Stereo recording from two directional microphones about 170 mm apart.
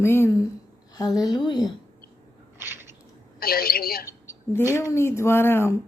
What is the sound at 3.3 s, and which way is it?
Speech, 60° left (ahead or behind).